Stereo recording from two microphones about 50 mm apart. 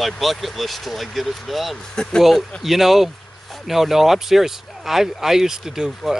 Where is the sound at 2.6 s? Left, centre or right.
Centre.